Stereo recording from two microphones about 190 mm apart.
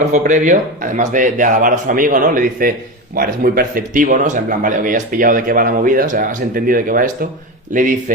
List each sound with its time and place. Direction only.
0.0 s a man's voice: 40° right (ahead or behind)